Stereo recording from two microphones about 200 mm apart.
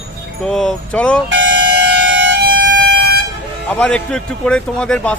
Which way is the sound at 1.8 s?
60° right (ahead or behind).